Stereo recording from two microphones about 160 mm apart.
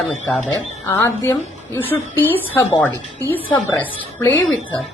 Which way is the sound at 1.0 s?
15° left (ahead or behind).